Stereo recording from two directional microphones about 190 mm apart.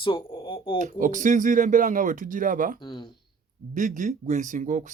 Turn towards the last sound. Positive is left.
turn(degrees=-40)  # may be behind; listen again after turning